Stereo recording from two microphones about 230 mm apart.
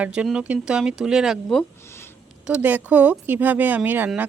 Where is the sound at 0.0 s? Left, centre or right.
Centre.